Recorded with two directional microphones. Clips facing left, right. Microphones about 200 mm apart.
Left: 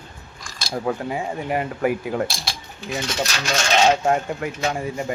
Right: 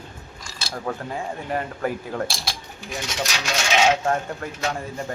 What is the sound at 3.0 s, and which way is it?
Speech, 15° right (ahead or behind).